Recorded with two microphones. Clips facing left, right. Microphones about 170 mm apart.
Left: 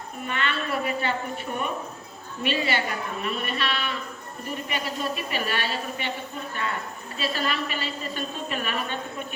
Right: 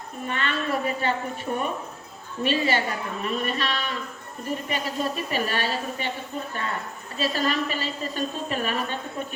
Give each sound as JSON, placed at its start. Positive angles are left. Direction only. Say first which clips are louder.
{"t": 0.3, "sound": "a woman's voice", "louder": "right 2 dB", "side_deg": -40}
{"t": 2.4, "sound": "a woman's voice", "louder": "right 2 dB", "side_deg": -40}
{"t": 7.2, "sound": "a woman's voice", "louder": "right 3 dB", "side_deg": -40}